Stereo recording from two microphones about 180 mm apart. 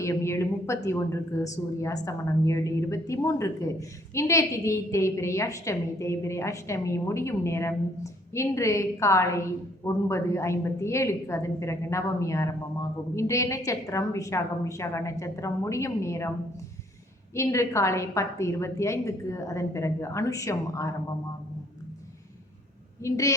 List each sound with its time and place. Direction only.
0.0 s a woman's voice: 15° left (ahead or behind)
17.3 s a woman's voice: 15° left (ahead or behind)
23.0 s a woman's voice: 15° left (ahead or behind)